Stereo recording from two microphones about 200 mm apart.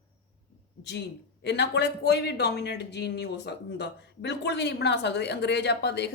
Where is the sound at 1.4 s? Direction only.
60° left (ahead or behind).